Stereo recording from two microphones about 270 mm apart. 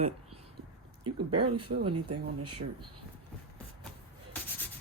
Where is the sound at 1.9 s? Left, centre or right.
Right.